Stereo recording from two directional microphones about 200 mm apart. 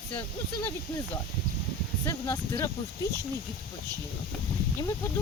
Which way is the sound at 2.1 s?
15° left (ahead or behind).